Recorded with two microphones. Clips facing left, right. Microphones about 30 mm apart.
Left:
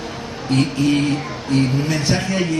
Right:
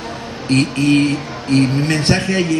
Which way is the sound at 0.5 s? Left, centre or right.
Right.